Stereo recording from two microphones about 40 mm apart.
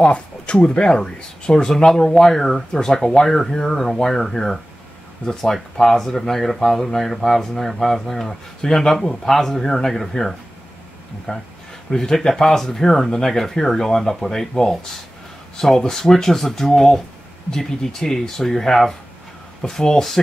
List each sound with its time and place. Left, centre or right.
0.0 s speech: left; by 20.2 s centre